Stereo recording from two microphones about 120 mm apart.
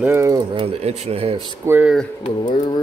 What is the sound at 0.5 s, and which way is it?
Speech, 55° right (ahead or behind).